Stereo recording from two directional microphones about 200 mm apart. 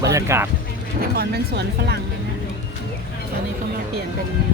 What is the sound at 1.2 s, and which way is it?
Speech, 55° right (ahead or behind).